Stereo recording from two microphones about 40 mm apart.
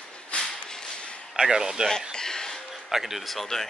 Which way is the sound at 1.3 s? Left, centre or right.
Centre.